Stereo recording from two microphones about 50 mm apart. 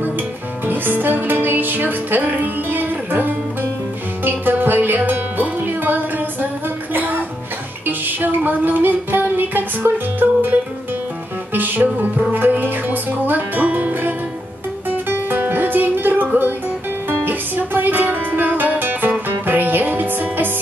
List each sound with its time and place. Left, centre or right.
0.7 s music: right